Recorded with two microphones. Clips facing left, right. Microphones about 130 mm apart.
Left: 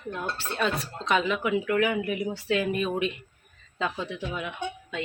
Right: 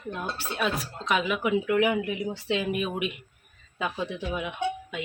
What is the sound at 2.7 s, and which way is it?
A woman's voice, 10° right (ahead or behind).